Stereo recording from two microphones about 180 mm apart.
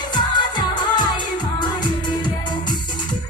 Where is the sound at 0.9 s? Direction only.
25° left (ahead or behind).